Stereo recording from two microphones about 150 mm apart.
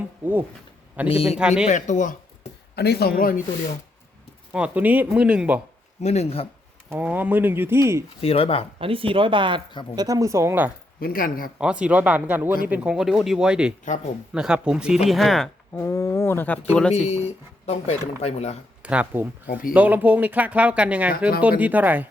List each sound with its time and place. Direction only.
1.0 s speech: 40° left (ahead or behind)
1.4 s speech: 5° right (ahead or behind)
1.6 s speech: 50° left (ahead or behind)
2.7 s speech: 90° left; by 3.4 s 70° left (ahead or behind)
4.5 s speech: 10° right (ahead or behind)
6.0 s speech: 45° left (ahead or behind)
6.9 s speech: 10° right (ahead or behind)
8.2 s speech: 40° left (ahead or behind)
8.8 s speech: 35° right (ahead or behind); by 10.7 s 15° right (ahead or behind)
11.0 s speech: 70° left (ahead or behind)
11.6 s speech: 5° right (ahead or behind)
15.7 s speech: 15° left (ahead or behind)
17.1 s speech: 45° left (ahead or behind)
18.8 s speech: 10° right (ahead or behind)